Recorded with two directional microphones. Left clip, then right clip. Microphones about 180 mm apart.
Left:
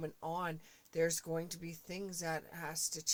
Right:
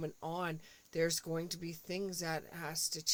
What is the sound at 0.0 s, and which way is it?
Speech, 40° right (ahead or behind).